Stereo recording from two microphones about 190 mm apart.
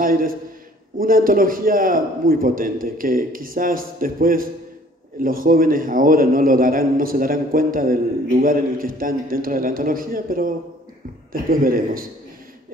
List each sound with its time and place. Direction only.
0.0 s a man's voice: 50° right (ahead or behind)